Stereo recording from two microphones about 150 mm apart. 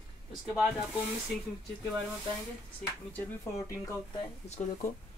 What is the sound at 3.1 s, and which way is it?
Speech, 20° left (ahead or behind).